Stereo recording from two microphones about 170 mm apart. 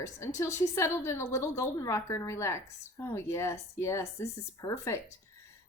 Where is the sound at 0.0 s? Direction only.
15° left (ahead or behind).